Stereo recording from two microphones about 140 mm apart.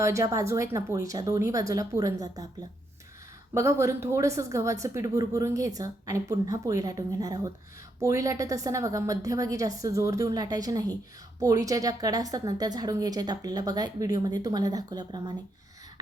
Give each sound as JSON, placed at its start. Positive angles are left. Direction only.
{"t": 0.0, "sound": "speech", "side_deg": -20}
{"t": 3.5, "sound": "speech", "side_deg": -20}